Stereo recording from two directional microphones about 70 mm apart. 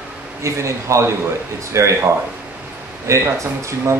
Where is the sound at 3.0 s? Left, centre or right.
Right.